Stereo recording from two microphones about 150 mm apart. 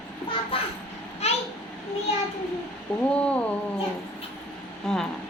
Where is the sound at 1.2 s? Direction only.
45° left (ahead or behind).